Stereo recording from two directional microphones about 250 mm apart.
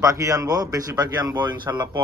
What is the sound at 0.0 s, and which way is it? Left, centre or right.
Speech, centre.